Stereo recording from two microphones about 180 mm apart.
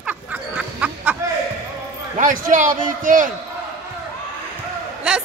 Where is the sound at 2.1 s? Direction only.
45° right (ahead or behind).